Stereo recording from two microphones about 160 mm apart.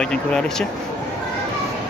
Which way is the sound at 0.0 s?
5° left (ahead or behind).